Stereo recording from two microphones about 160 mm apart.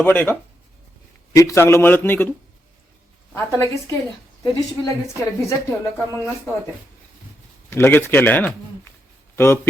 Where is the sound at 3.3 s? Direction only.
15° left (ahead or behind).